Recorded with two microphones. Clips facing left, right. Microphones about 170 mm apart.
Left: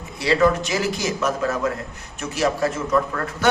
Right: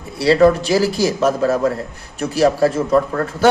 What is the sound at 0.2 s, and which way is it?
A man's voice, 35° right (ahead or behind).